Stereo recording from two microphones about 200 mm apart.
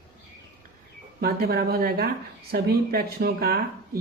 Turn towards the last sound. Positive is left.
turn(degrees=-50)  # may be behind; listen again after turning